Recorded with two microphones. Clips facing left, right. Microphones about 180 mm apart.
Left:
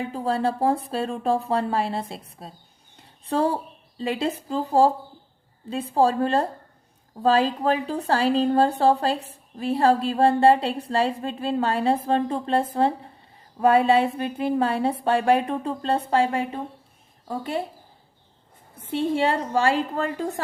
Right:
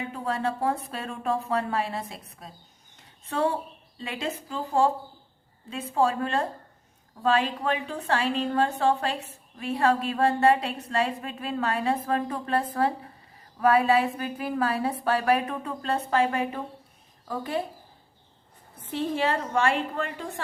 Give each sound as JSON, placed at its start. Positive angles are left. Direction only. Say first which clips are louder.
{"t": 0.1, "sound": "a woman's voice", "louder": "left 5 dB", "side_deg": 30}
{"t": 18.8, "sound": "a woman's voice", "louder": "left 4 dB", "side_deg": 25}